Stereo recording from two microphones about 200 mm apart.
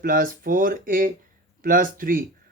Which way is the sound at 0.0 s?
45° right (ahead or behind).